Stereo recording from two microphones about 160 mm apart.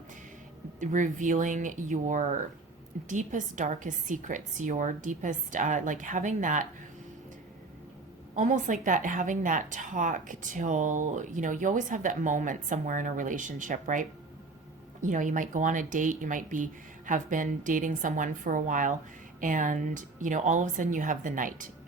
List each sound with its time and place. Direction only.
0.8 s a woman's voice: 50° right (ahead or behind)
8.4 s a woman's voice: 50° right (ahead or behind)